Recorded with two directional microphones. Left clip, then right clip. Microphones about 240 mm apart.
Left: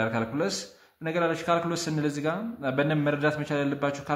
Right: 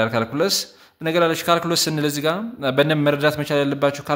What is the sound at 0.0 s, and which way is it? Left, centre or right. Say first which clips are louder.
A man's voice: right 8 dB; right.